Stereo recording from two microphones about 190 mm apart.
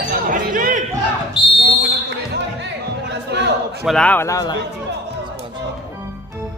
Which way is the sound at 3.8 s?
5° left (ahead or behind).